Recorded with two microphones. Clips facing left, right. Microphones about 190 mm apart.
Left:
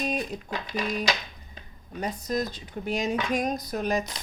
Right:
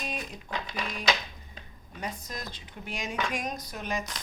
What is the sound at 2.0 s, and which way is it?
Speech, 40° left (ahead or behind).